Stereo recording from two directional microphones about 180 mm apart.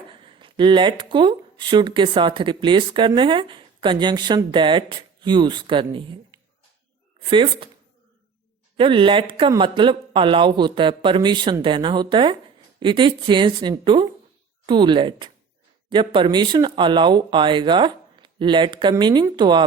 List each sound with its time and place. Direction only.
0.1 s speech: 30° right (ahead or behind)
8.8 s speech: 30° right (ahead or behind)